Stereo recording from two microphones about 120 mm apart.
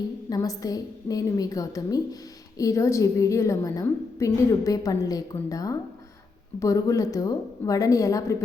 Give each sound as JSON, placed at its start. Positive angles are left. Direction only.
{"t": 0.3, "sound": "a woman's voice", "side_deg": 30}